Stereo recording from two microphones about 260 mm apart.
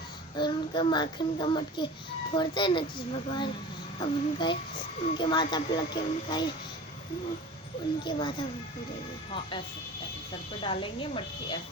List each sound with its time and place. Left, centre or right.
0.3 s a child's voice: centre
8.0 s speech: centre
10.6 s speech: left